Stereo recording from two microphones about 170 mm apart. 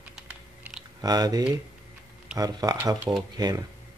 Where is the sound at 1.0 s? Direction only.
20° right (ahead or behind).